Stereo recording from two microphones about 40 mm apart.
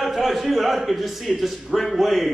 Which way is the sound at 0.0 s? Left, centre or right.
Centre.